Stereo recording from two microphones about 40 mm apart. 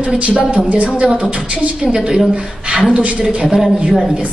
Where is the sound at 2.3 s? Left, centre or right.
Right.